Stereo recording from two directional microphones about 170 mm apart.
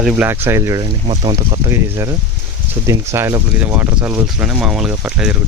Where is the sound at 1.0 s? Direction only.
30° right (ahead or behind).